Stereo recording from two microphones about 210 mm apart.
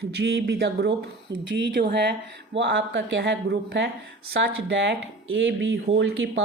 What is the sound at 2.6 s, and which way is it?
Speech, 60° right (ahead or behind).